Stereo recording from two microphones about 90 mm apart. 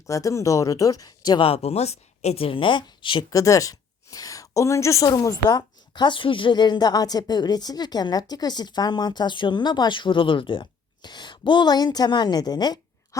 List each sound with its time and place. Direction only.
0.1 s speech: 35° left (ahead or behind)
2.4 s speech: 80° left
3.2 s a woman's voice: 35° left (ahead or behind)